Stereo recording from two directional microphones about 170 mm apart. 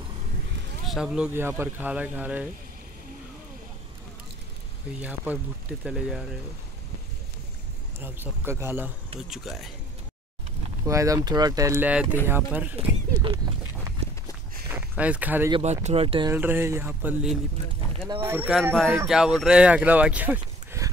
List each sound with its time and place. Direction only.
0.8 s speech: 5° right (ahead or behind)
5.0 s speech: 10° right (ahead or behind)
8.0 s speech: 15° right (ahead or behind)
9.3 s speech: centre (ahead or behind)
10.9 s speech: 20° right (ahead or behind)
12.7 s speech: 30° right (ahead or behind)
14.7 s speech: 10° right (ahead or behind)
15.6 s speech: 40° right (ahead or behind)
16.3 s speech: 10° right (ahead or behind)
18.5 s speech: centre (ahead or behind)